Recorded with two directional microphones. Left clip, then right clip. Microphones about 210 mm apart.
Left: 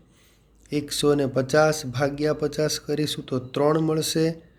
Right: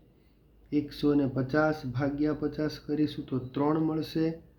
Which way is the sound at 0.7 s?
40° left (ahead or behind).